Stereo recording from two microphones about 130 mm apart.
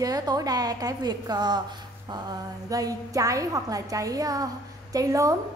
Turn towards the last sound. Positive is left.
turn(degrees=-25)  # may be behind; listen again after turning